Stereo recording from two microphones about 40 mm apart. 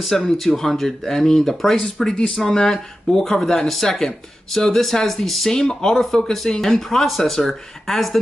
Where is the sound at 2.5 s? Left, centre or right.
Centre.